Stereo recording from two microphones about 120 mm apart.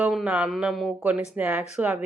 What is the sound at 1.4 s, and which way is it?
Speech, 10° right (ahead or behind).